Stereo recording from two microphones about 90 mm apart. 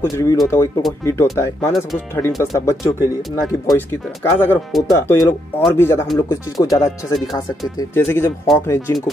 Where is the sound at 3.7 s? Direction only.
20° left (ahead or behind).